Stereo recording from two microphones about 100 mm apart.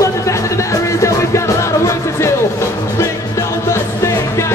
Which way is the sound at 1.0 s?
30° left (ahead or behind).